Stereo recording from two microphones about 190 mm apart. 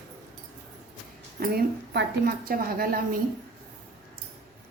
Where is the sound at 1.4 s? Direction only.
55° right (ahead or behind).